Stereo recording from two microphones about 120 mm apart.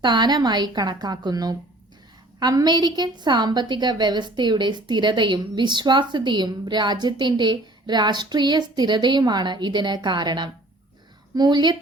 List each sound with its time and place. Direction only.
0.0 s a woman's voice: 35° right (ahead or behind)